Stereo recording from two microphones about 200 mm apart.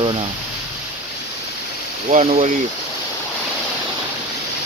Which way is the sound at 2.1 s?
35° right (ahead or behind).